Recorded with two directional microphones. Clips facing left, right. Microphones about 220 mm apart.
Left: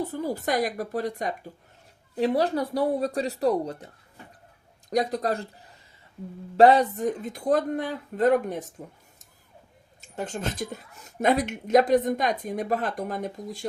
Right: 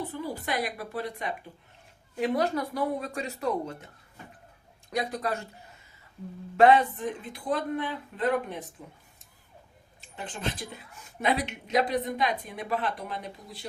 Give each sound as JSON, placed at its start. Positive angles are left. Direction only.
{"t": 0.0, "sound": "speech", "side_deg": 40}
{"t": 2.1, "sound": "speech", "side_deg": 30}
{"t": 4.9, "sound": "speech", "side_deg": 40}
{"t": 6.6, "sound": "speech", "side_deg": 40}
{"t": 10.0, "sound": "speech", "side_deg": 45}